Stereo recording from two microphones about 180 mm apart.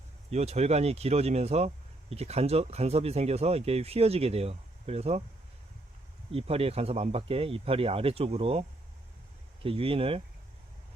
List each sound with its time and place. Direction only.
0.3 s speech: 35° right (ahead or behind)
6.3 s speech: 35° right (ahead or behind)
9.6 s speech: 30° right (ahead or behind)